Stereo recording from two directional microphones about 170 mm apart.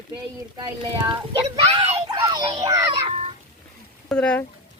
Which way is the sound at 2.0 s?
25° right (ahead or behind).